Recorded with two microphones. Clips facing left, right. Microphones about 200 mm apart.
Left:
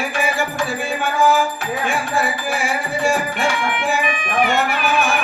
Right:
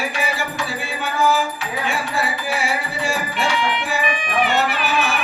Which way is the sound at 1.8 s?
50° left (ahead or behind).